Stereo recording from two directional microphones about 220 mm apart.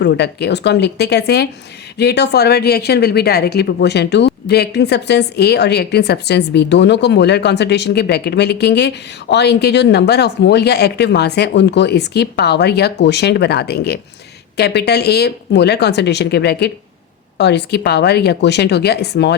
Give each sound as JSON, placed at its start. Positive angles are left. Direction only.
{"t": 0.0, "sound": "speech", "side_deg": 50}